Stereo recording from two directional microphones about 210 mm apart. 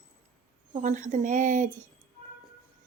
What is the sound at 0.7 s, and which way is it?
Speech, 35° right (ahead or behind).